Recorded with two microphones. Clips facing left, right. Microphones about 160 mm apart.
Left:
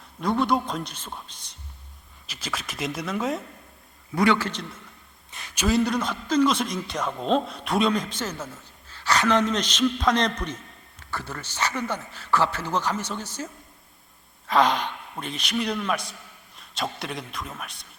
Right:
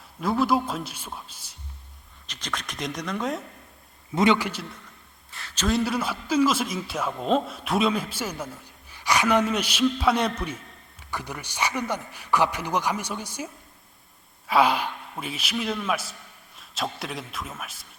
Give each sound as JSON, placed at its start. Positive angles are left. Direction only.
{"t": 0.2, "sound": "a man's voice", "side_deg": -5}
{"t": 2.2, "sound": "a man's voice", "side_deg": 5}
{"t": 4.1, "sound": "a man's voice", "side_deg": -20}
{"t": 5.3, "sound": "a sound", "side_deg": 15}
{"t": 5.6, "sound": "a man's voice", "side_deg": 0}